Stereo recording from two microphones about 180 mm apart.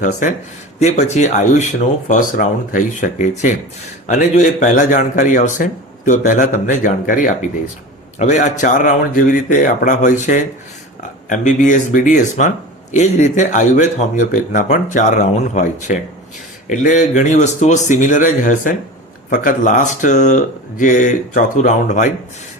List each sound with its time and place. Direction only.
0.0 s a man's voice: 45° left (ahead or behind)